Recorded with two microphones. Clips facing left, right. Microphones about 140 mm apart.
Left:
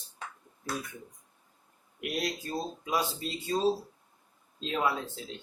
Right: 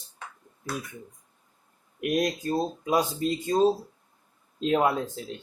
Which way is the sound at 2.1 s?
45° right (ahead or behind).